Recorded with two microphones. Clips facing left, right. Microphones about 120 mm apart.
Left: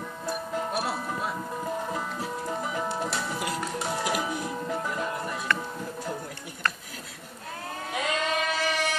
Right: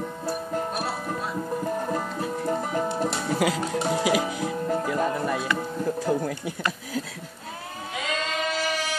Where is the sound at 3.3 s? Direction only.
90° right.